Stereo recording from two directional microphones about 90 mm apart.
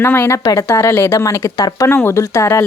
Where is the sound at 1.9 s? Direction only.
25° left (ahead or behind).